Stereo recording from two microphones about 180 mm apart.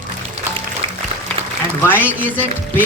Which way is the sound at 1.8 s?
10° left (ahead or behind).